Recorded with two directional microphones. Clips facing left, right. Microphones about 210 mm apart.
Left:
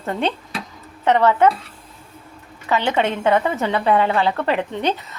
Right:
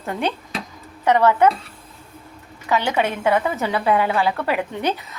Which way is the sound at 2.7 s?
15° right (ahead or behind).